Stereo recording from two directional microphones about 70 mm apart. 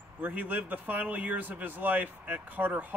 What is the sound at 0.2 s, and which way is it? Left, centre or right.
Speech, right.